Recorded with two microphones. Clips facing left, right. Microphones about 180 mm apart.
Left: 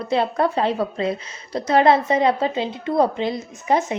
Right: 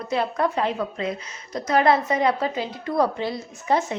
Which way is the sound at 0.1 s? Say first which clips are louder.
Left 3 dB; 30° left (ahead or behind).